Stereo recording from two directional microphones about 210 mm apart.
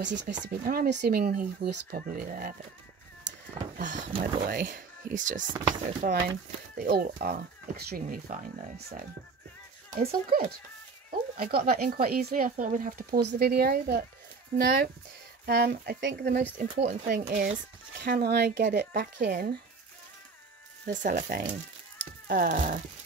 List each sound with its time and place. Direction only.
0.0 s speech: 55° right (ahead or behind); by 2.5 s 40° right (ahead or behind)
3.7 s speech: 35° right (ahead or behind)
5.5 s speech: 20° right (ahead or behind)
6.0 s speech: 50° right (ahead or behind)
15.4 s speech: 50° right (ahead or behind)
16.5 s speech: 40° right (ahead or behind)
17.9 s speech: 50° right (ahead or behind)
20.9 s speech: 35° right (ahead or behind)